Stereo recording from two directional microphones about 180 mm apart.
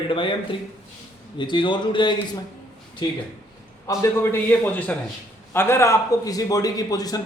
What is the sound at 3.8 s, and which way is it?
A man's voice, 15° left (ahead or behind).